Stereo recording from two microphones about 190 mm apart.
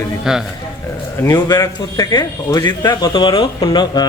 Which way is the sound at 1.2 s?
15° left (ahead or behind).